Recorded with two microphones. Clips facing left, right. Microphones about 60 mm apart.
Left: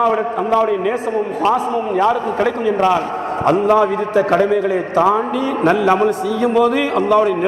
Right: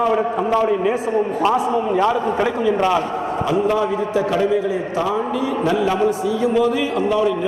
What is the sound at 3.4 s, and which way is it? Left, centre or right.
A man's voice, left.